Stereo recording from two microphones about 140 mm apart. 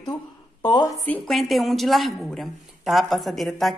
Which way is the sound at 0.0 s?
30° left (ahead or behind).